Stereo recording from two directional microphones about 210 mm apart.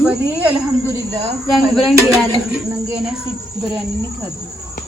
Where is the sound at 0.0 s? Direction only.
10° right (ahead or behind).